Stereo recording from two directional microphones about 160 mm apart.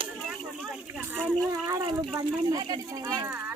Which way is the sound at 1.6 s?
25° right (ahead or behind).